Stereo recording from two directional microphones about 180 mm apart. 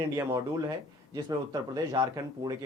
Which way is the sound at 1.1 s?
20° right (ahead or behind).